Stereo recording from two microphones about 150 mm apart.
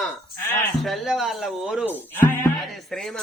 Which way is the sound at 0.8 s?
Centre (ahead or behind).